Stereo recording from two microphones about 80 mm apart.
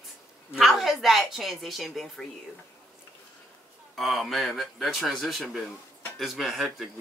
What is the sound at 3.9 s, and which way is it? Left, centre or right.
Speech, centre.